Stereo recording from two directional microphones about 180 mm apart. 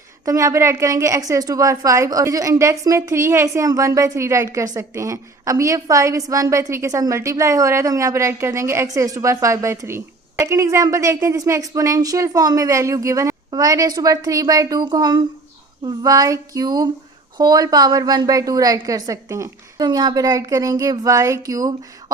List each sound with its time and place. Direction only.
0.3 s a woman's voice: 15° right (ahead or behind)